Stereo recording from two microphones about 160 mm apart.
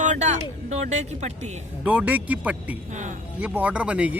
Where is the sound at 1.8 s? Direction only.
10° right (ahead or behind).